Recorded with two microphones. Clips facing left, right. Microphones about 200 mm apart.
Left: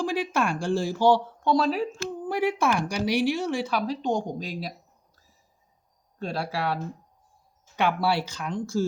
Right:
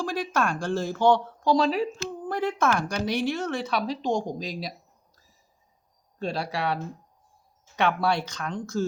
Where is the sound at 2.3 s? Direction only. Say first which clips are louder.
Left 1 dB; 10° left (ahead or behind).